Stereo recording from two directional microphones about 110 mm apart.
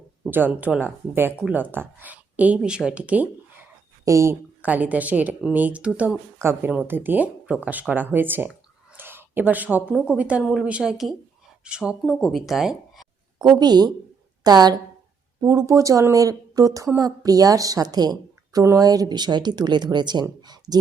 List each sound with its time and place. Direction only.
0.3 s speech: 15° right (ahead or behind)
4.0 s speech: 25° right (ahead or behind)
4.6 s speech: 15° right (ahead or behind)
13.4 s a woman's voice: 40° right (ahead or behind)